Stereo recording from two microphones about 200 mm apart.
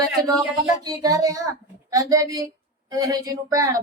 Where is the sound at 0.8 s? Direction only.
20° right (ahead or behind).